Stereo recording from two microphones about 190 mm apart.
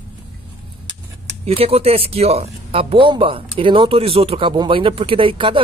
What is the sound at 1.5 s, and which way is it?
Speech, 30° right (ahead or behind).